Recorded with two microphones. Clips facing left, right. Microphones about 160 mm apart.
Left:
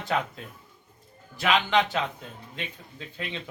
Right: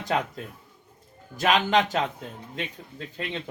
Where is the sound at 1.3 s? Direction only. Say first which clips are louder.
Right 2 dB; 45° right (ahead or behind).